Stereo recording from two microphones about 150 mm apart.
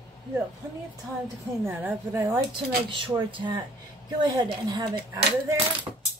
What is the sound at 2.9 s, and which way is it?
Speech, 35° right (ahead or behind).